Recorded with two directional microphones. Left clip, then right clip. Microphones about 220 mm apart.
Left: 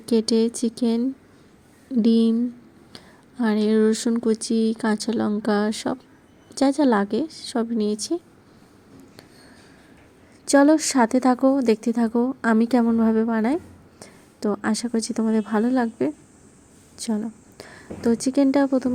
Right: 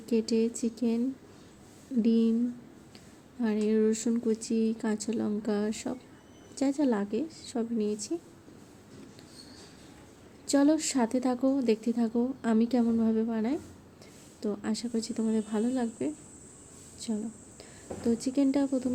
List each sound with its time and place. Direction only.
0.0 s speech: 40° left (ahead or behind)
3.4 s speech: 40° left (ahead or behind)
10.4 s speech: 35° left (ahead or behind)